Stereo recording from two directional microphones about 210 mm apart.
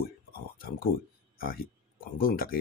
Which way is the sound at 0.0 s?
45° left (ahead or behind).